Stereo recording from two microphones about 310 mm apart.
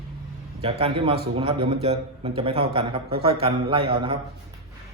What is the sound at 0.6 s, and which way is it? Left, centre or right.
A man's voice, centre.